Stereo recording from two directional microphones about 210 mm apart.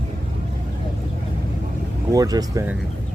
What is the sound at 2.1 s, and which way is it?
Speech, 15° right (ahead or behind).